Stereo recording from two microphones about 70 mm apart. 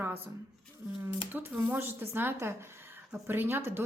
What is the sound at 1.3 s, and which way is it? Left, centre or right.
A woman's voice, right.